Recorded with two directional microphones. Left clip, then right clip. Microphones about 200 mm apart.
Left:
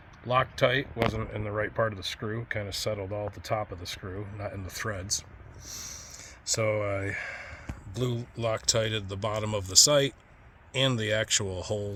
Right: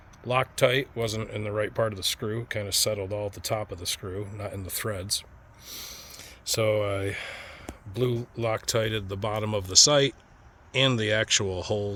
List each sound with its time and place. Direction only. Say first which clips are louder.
0.3 s speech: right 1 dB; 35° right (ahead or behind)
5.6 s snort: right 1 dB; 35° right (ahead or behind)
6.6 s speech: right 3 dB; 55° right (ahead or behind)
7.9 s speech: right 5 dB; 35° right (ahead or behind)